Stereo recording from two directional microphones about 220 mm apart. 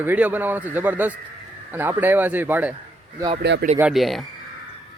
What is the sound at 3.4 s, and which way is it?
Speech, 50° right (ahead or behind).